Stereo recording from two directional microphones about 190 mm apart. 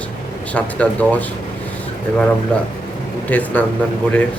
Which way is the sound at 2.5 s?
5° left (ahead or behind).